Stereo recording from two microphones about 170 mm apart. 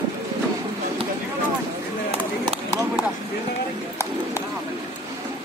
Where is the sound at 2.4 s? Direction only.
25° right (ahead or behind).